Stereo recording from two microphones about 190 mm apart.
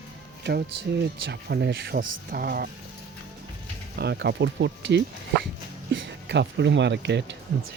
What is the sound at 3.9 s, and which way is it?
Speech, 60° right (ahead or behind).